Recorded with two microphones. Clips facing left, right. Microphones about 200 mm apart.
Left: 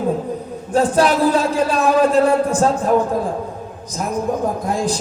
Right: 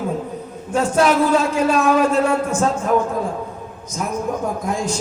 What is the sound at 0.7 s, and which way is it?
A man's voice, 35° left (ahead or behind).